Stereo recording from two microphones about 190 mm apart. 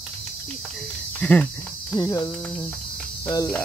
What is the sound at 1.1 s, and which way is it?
Speech, 5° left (ahead or behind).